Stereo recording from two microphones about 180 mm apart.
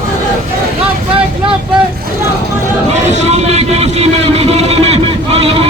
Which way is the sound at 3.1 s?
40° right (ahead or behind).